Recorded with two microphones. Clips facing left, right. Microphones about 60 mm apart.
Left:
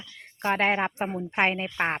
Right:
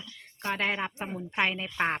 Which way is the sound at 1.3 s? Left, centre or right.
Left.